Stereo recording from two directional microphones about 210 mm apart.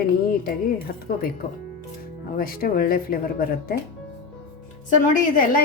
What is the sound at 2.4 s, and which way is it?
Speech, 45° left (ahead or behind).